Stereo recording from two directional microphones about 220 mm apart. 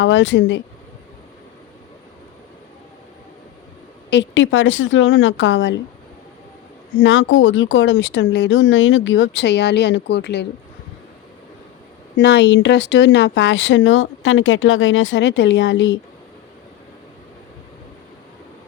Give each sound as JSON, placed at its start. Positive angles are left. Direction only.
{"t": 0.0, "sound": "speech", "side_deg": 55}
{"t": 4.1, "sound": "speech", "side_deg": 55}
{"t": 7.0, "sound": "speech", "side_deg": 60}
{"t": 12.1, "sound": "speech", "side_deg": 50}